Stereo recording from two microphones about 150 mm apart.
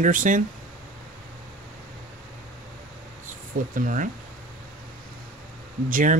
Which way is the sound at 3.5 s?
70° right (ahead or behind).